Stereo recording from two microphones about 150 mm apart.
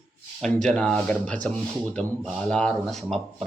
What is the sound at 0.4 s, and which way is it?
Speech, 5° left (ahead or behind).